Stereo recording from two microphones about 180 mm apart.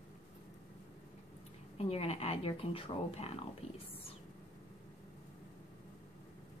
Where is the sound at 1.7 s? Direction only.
35° left (ahead or behind).